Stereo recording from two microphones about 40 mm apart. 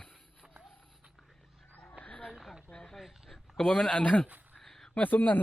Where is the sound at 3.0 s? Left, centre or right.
Centre.